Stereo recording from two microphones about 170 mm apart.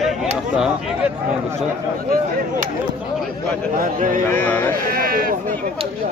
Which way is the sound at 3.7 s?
55° right (ahead or behind).